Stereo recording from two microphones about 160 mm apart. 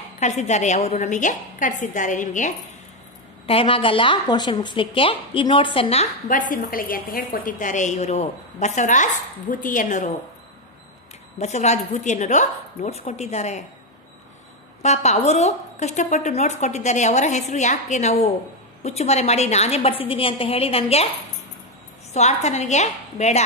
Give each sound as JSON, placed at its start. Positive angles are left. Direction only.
{"t": 0.2, "sound": "a woman's voice", "side_deg": 45}
{"t": 3.4, "sound": "a woman's voice", "side_deg": 35}
{"t": 6.2, "sound": "a woman's voice", "side_deg": 55}
{"t": 11.3, "sound": "a woman's voice", "side_deg": 45}
{"t": 14.8, "sound": "a woman's voice", "side_deg": 45}
{"t": 22.1, "sound": "a woman's voice", "side_deg": 45}